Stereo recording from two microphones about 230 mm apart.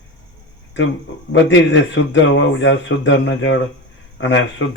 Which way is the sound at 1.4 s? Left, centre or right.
Left.